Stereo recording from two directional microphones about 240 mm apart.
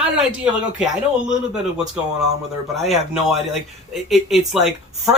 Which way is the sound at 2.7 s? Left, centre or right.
Centre.